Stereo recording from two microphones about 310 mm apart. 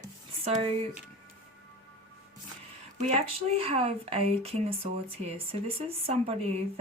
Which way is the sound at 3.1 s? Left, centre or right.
Centre.